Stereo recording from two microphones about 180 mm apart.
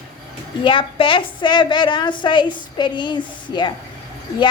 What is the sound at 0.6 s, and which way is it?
A woman's voice, 25° left (ahead or behind).